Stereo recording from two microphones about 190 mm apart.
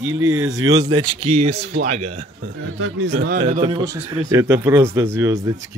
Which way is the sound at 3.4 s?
30° right (ahead or behind).